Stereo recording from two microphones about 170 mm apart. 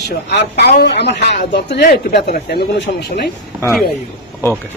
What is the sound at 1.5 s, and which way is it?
A man's voice, 80° left.